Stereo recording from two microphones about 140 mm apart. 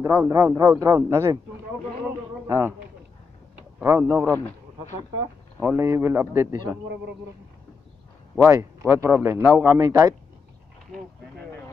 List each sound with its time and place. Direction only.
0.0 s a man's voice: 10° right (ahead or behind)
0.3 s speech: 25° right (ahead or behind)
2.4 s speech: 20° right (ahead or behind)
3.8 s speech: 15° right (ahead or behind)
5.6 s speech: 20° right (ahead or behind)
8.5 s speech: 20° right (ahead or behind)